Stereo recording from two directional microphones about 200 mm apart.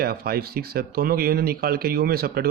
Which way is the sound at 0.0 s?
50° right (ahead or behind).